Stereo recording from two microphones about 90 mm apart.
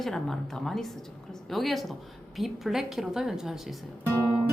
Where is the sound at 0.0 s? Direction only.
5° left (ahead or behind).